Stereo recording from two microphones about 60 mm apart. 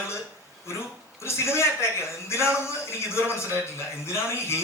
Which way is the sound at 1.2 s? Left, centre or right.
Left.